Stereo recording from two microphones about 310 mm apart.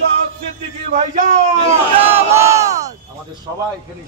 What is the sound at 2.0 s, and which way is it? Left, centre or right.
Crowd, centre.